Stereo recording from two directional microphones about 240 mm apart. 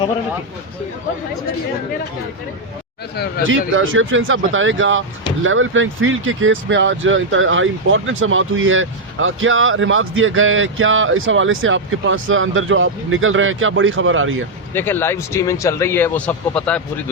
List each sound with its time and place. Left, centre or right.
3.4 s speech: right
14.7 s a man's voice: centre